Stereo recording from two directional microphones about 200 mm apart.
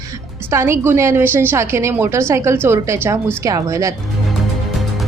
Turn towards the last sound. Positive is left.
turn(degrees=-15)  # may be behind; listen again after turning